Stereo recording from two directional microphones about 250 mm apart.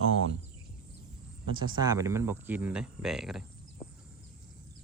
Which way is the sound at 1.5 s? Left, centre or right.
Centre.